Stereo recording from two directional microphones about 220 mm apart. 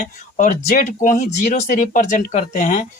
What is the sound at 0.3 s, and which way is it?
Speech, 35° left (ahead or behind).